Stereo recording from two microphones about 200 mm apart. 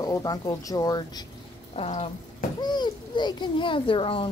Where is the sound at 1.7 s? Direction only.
30° left (ahead or behind).